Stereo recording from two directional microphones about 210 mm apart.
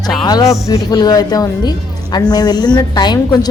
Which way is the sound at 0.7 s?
20° left (ahead or behind).